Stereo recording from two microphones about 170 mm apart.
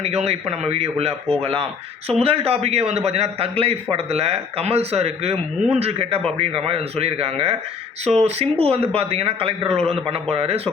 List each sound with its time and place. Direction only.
0.0 s a man's voice: 40° right (ahead or behind)